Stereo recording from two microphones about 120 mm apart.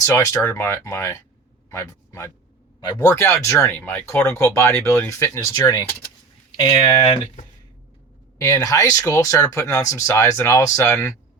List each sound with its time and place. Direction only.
0.0 s speech: 25° left (ahead or behind)
8.4 s speech: 25° left (ahead or behind)